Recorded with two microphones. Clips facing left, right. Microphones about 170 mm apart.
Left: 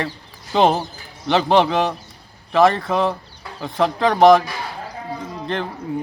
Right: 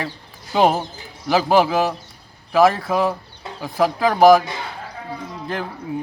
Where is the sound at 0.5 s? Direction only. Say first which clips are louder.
Left 1 dB; 5° right (ahead or behind).